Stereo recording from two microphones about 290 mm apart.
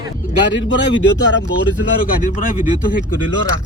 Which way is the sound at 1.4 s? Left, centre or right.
Left.